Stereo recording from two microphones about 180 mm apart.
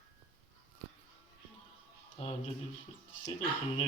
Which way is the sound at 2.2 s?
35° left (ahead or behind).